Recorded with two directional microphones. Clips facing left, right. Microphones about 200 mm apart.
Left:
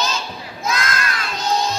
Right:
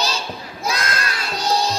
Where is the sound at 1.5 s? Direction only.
35° right (ahead or behind).